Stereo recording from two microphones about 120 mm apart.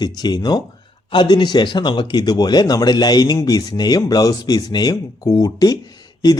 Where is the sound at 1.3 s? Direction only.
35° left (ahead or behind).